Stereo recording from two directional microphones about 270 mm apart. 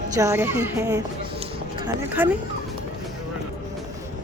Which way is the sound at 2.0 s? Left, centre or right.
Centre.